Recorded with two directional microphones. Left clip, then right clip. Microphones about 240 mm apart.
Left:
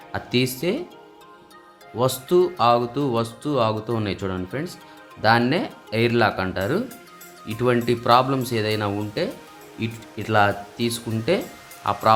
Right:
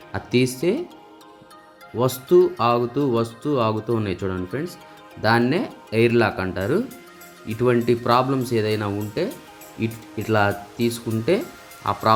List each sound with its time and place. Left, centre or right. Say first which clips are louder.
0.1 s speech: right 2 dB; centre
2.0 s speech: right 2 dB; centre